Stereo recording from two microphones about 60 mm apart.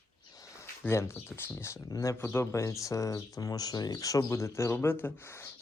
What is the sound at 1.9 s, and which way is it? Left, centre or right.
Speech, left.